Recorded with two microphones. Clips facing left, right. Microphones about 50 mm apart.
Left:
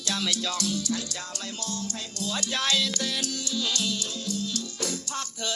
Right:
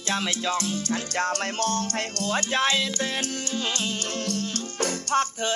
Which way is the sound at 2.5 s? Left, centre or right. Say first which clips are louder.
Right 2 dB; right.